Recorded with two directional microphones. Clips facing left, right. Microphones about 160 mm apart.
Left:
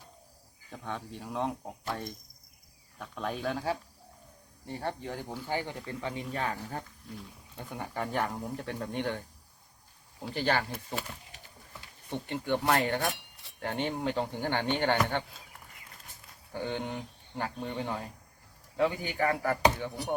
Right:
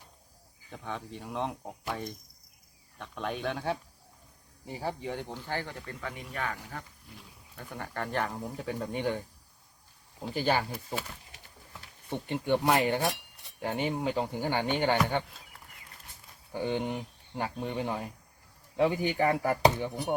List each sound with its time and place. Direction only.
0.7 s speech: centre (ahead or behind)
5.3 s speech: 15° left (ahead or behind); by 6.8 s 30° left (ahead or behind)
7.7 s speech: 10° left (ahead or behind); by 9.2 s 10° right (ahead or behind)
10.3 s speech: 10° right (ahead or behind)
12.1 s speech: 15° right (ahead or behind)
16.5 s speech: 15° right (ahead or behind)